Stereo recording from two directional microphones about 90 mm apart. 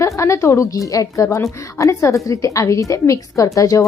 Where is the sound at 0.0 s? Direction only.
35° left (ahead or behind).